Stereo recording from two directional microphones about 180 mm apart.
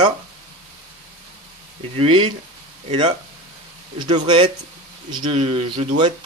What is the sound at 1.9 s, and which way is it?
Speech, 35° right (ahead or behind).